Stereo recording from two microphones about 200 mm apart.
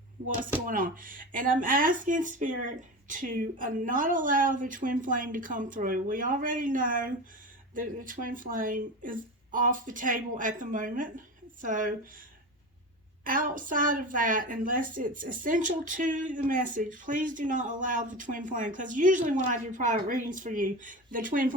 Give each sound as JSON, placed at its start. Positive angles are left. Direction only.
{"t": 0.7, "sound": "a woman's voice", "side_deg": -45}
{"t": 13.2, "sound": "a woman's voice", "side_deg": -45}